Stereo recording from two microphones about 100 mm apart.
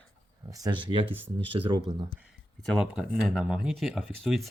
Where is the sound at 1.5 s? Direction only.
60° right (ahead or behind).